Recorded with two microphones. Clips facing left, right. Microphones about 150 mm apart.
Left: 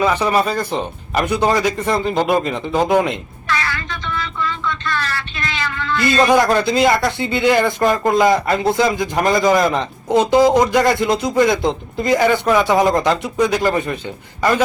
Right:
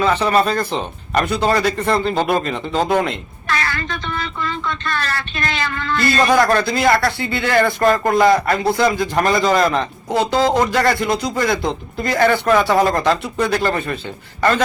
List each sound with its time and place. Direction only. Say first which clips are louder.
0.0 s a man's voice: even; 10° left (ahead or behind)
3.7 s a sound: right 1 dB; 50° right (ahead or behind)
6.0 s a man's voice: left 1 dB; 20° left (ahead or behind)